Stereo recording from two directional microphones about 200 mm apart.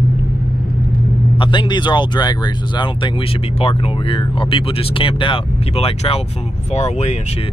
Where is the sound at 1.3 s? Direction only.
25° left (ahead or behind).